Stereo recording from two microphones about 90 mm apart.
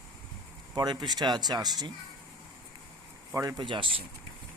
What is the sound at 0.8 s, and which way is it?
Speech, 50° right (ahead or behind).